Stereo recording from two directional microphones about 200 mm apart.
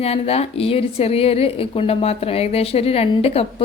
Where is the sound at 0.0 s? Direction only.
30° left (ahead or behind).